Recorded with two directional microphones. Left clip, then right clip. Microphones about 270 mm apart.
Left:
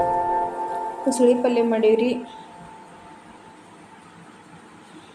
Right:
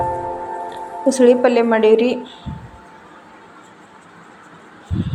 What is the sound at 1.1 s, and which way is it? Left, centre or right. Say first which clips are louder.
A woman's voice: right 6 dB; centre.